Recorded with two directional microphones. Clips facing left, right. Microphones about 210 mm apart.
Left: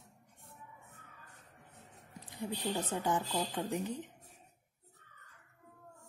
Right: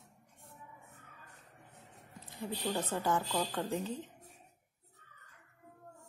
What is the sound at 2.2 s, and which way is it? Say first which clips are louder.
Speech: even; 20° left (ahead or behind).